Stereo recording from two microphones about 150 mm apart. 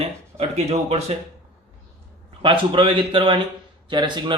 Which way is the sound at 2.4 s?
35° right (ahead or behind).